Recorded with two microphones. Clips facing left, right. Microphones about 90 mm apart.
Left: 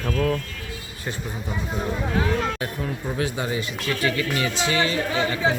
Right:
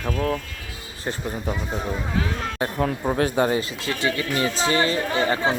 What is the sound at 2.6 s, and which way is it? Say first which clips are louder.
Speech: right 5 dB; 50° right (ahead or behind).